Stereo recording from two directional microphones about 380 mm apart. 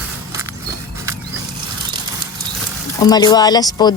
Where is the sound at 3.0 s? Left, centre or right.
Centre.